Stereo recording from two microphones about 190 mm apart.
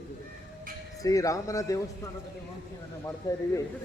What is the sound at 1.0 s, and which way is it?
Speech, 15° left (ahead or behind).